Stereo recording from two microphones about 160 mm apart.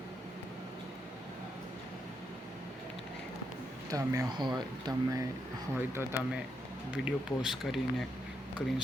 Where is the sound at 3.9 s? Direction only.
20° right (ahead or behind).